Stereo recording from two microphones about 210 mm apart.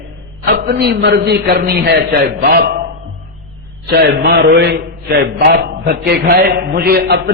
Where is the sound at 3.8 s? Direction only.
50° right (ahead or behind).